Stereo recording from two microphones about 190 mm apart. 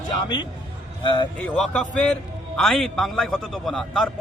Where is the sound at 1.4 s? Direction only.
5° left (ahead or behind).